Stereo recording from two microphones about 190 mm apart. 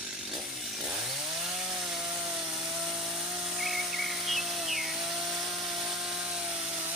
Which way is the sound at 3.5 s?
Centre (ahead or behind).